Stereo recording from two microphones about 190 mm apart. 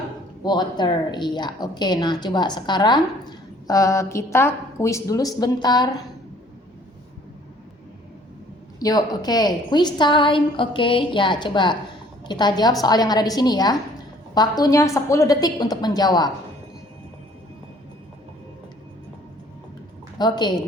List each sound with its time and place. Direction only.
0.4 s speech: 20° left (ahead or behind)
8.8 s speech: 20° left (ahead or behind)
20.1 s speech: 20° left (ahead or behind)